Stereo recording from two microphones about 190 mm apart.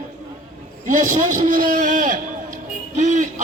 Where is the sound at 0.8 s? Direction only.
45° right (ahead or behind).